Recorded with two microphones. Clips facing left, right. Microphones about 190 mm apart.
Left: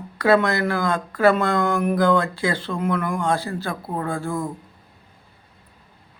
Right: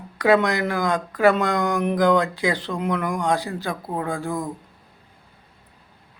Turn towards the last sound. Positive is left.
turn(degrees=-15)  # may be behind; listen again after turning